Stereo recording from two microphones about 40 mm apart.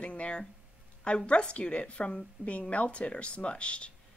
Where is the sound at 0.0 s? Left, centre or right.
Left.